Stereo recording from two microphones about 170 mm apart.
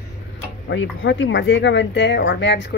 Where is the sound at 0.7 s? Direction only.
90° left.